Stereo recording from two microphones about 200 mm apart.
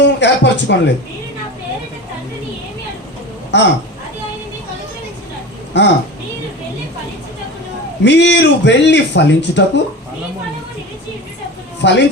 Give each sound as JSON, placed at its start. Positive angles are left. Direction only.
{"t": 0.0, "sound": "a sound", "side_deg": 60}
{"t": 3.5, "sound": "a man's voice", "side_deg": 60}
{"t": 5.7, "sound": "a man's voice", "side_deg": 60}
{"t": 8.0, "sound": "a man's voice", "side_deg": 60}
{"t": 11.8, "sound": "a man's voice", "side_deg": 60}